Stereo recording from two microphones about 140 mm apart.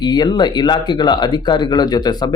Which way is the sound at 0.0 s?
30° left (ahead or behind).